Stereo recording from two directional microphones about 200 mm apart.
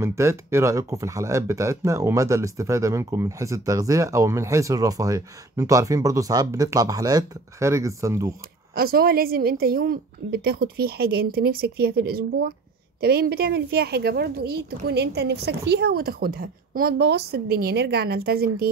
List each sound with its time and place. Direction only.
0.0 s speech: 15° right (ahead or behind)
8.7 s a woman's voice: 50° right (ahead or behind)